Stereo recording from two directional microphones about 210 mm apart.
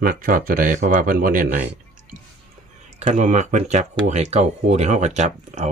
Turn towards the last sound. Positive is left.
turn(degrees=-35)  # may be behind; listen again after turning